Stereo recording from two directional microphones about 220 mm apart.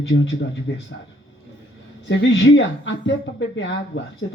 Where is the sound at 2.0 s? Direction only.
55° left (ahead or behind).